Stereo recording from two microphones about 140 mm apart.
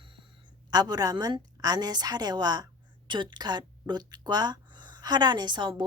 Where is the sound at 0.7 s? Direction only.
25° right (ahead or behind).